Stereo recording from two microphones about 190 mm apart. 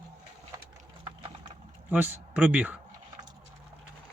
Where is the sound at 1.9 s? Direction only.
10° right (ahead or behind).